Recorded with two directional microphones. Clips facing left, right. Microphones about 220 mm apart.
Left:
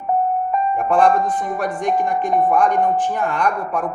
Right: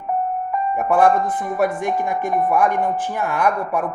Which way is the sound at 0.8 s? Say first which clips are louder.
Right 1 dB; 5° right (ahead or behind).